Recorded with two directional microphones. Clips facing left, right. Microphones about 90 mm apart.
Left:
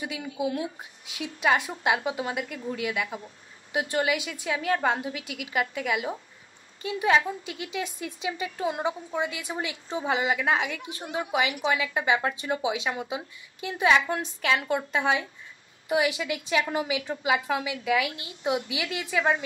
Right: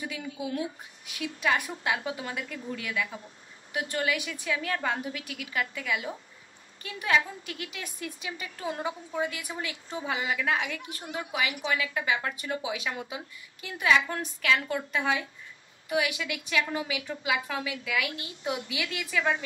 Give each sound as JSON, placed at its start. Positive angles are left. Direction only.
{"t": 0.0, "sound": "a woman's voice", "side_deg": 20}